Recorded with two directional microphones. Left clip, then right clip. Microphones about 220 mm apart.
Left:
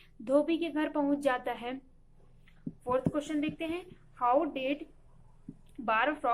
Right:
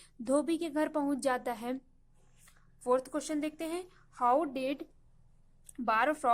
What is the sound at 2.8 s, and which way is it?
A woman's voice, 45° right (ahead or behind).